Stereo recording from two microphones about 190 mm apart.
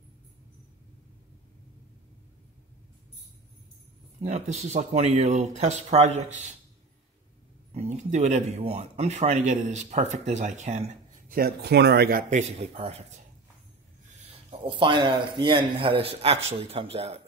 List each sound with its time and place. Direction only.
4.2 s speech: 35° right (ahead or behind)
7.7 s speech: 35° right (ahead or behind)
14.6 s speech: 25° right (ahead or behind)